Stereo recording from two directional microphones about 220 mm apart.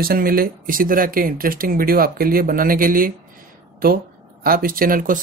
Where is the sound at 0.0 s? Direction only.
40° right (ahead or behind).